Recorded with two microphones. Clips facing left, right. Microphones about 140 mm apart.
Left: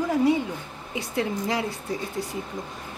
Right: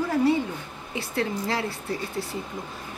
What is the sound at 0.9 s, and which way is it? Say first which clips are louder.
Speech: left 1 dB; 15° left (ahead or behind).